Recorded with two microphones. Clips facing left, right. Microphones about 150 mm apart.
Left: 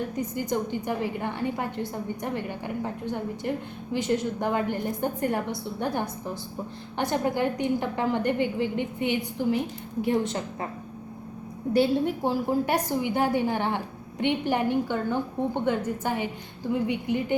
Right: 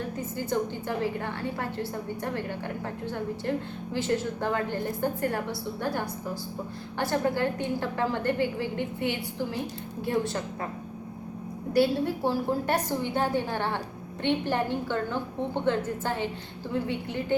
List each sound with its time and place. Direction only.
0.2 s a woman's voice: 15° left (ahead or behind)
11.7 s a woman's voice: 20° left (ahead or behind)